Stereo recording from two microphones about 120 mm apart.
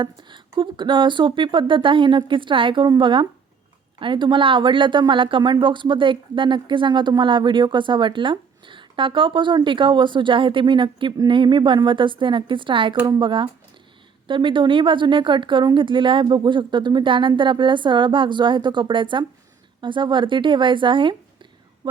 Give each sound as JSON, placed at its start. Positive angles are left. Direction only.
{"t": 0.0, "sound": "a woman's voice", "side_deg": -40}